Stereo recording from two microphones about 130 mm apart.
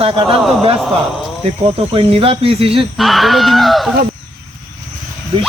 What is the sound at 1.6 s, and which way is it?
Speech, 45° right (ahead or behind).